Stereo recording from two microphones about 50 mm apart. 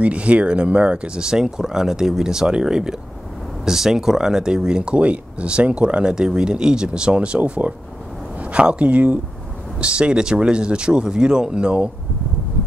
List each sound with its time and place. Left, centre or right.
0.0 s speech: right